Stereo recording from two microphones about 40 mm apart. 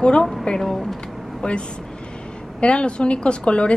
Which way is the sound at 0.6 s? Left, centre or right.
Centre.